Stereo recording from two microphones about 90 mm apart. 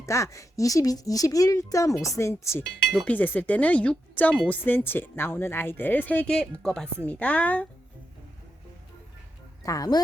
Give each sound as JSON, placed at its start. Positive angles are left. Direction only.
{"t": 0.0, "sound": "speech", "side_deg": 35}
{"t": 2.9, "sound": "speech", "side_deg": 20}
{"t": 6.3, "sound": "speech", "side_deg": 5}
{"t": 7.0, "sound": "speech", "side_deg": 15}
{"t": 9.6, "sound": "speech", "side_deg": 45}